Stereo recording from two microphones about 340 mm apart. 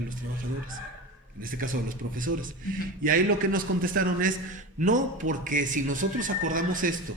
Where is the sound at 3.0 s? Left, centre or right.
Right.